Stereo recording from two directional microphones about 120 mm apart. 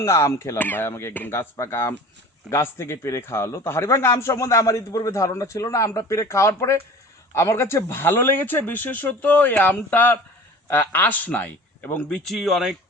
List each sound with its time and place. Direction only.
0.0 s speech: 25° left (ahead or behind); by 12.7 s centre (ahead or behind)